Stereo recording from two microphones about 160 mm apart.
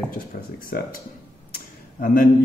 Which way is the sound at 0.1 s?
65° left (ahead or behind).